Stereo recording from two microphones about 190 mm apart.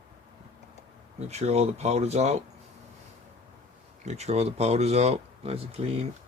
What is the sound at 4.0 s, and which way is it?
Speech, 35° right (ahead or behind).